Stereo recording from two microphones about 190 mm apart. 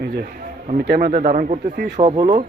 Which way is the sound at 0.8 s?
50° right (ahead or behind).